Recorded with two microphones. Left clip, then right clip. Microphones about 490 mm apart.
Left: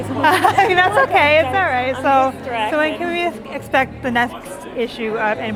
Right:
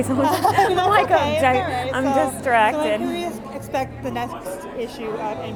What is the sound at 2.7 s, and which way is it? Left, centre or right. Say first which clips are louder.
Speech: left 4 dB; left.